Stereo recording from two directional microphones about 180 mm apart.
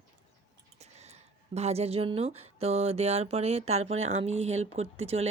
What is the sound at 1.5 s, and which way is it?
Speech, 35° right (ahead or behind).